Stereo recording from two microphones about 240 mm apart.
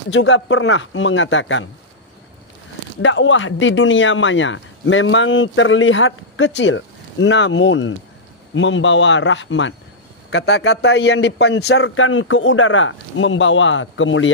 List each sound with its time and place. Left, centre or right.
0.1 s speech: left
3.0 s speech: left